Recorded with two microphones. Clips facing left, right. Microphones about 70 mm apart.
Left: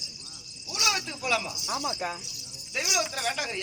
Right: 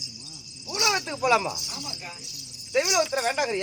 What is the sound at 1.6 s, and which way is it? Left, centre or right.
Speech, left.